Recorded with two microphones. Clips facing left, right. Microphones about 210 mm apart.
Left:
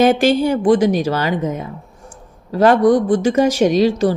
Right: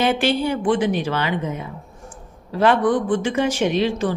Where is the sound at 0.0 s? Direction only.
45° left (ahead or behind).